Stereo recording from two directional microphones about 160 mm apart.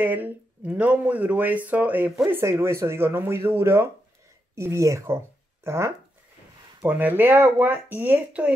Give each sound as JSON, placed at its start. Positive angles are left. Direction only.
{"t": 0.0, "sound": "speech", "side_deg": -10}